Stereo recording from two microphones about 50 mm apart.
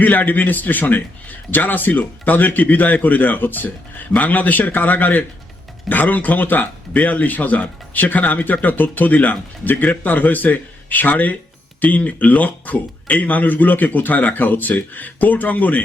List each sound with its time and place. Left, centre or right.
0.0 s a man's voice: left